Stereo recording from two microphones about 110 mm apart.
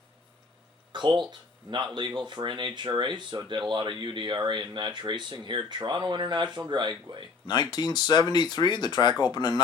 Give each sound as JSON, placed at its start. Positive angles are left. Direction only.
{"t": 0.9, "sound": "speech", "side_deg": -45}
{"t": 7.4, "sound": "speech", "side_deg": 40}